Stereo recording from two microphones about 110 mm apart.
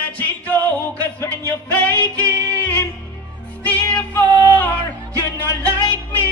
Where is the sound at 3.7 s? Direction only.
15° left (ahead or behind).